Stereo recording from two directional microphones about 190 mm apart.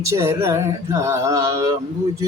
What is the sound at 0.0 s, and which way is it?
Male singing, 15° right (ahead or behind).